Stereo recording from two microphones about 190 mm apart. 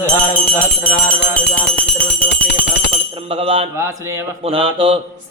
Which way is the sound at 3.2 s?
30° right (ahead or behind).